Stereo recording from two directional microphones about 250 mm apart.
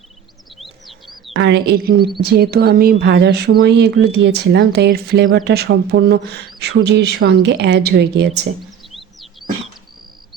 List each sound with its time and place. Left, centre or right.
0.6 s bird: centre
1.3 s a woman's voice: right
8.9 s a sound: centre